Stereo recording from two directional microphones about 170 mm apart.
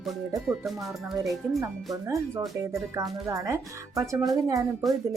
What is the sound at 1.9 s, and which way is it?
Speech, 20° right (ahead or behind).